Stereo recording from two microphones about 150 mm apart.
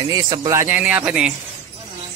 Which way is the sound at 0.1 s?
25° right (ahead or behind).